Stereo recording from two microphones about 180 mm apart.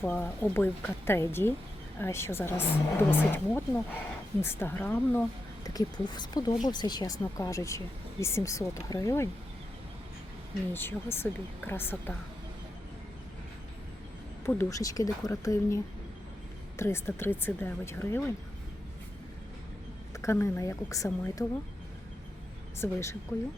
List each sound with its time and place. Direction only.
0.0 s speech: 10° left (ahead or behind)
10.7 s speech: 10° left (ahead or behind)
14.4 s speech: 15° left (ahead or behind)
20.2 s speech: 15° left (ahead or behind)
22.8 s speech: 15° left (ahead or behind)